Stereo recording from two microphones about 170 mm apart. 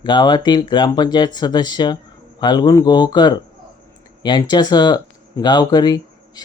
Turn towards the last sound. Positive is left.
turn(degrees=25)  # may be behind; listen again after turning